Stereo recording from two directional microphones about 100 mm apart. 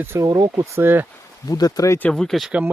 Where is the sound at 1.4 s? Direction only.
40° left (ahead or behind).